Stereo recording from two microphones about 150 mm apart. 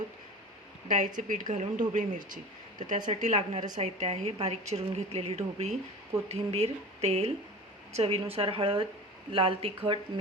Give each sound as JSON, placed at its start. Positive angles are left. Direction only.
{"t": 0.9, "sound": "speech", "side_deg": -60}
{"t": 3.1, "sound": "a woman's voice", "side_deg": -50}